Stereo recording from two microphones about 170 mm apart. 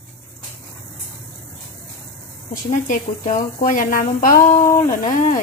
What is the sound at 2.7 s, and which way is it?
Speech, 45° left (ahead or behind).